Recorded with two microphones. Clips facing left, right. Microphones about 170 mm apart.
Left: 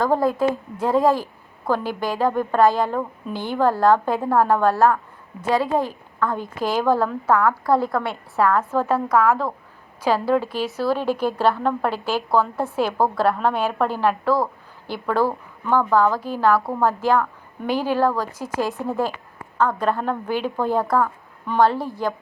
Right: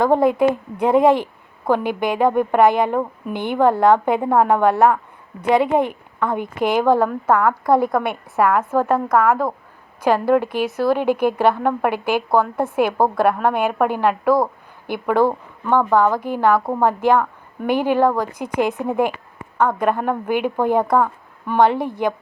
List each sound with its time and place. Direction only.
0.0 s a woman's voice: 20° right (ahead or behind)